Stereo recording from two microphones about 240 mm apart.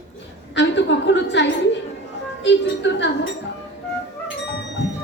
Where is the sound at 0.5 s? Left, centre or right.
Left.